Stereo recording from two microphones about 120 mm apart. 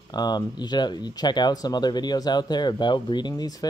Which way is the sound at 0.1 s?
35° left (ahead or behind).